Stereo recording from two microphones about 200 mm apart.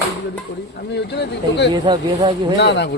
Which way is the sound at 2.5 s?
60° left (ahead or behind).